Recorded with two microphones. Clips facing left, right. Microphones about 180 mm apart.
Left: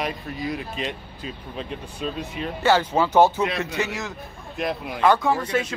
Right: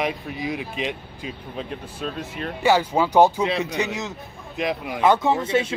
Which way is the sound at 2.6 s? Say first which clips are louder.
Right 1 dB; 10° right (ahead or behind).